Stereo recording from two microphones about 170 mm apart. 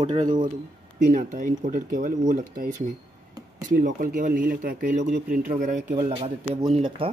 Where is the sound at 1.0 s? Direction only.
50° right (ahead or behind).